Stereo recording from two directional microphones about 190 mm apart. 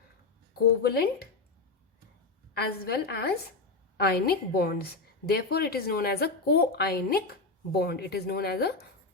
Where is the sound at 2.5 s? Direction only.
60° left (ahead or behind).